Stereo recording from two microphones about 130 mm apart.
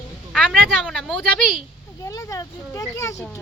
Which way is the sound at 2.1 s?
25° left (ahead or behind).